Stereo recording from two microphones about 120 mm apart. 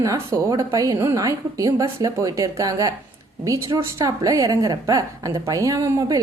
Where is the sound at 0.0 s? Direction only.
30° right (ahead or behind).